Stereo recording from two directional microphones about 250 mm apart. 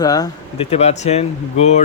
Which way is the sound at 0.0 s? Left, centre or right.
Centre.